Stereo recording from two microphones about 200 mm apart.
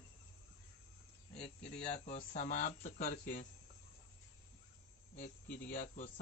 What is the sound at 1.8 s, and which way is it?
Speech, 35° left (ahead or behind).